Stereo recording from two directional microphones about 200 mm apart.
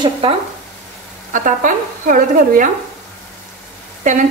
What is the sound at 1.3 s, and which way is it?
A woman's voice, 40° right (ahead or behind).